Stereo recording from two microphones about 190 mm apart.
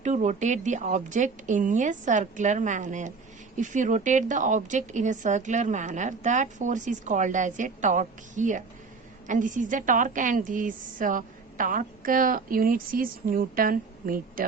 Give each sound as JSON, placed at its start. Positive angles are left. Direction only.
{"t": 0.0, "sound": "a woman's voice", "side_deg": -40}